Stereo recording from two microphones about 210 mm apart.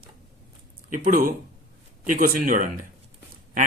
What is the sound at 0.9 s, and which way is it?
Speech, 40° right (ahead or behind).